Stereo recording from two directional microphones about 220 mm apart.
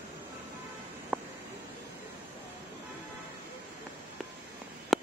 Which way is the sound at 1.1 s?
5° right (ahead or behind).